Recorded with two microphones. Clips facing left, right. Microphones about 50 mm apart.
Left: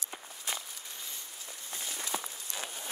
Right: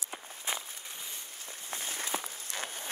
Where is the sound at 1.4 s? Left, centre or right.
Right.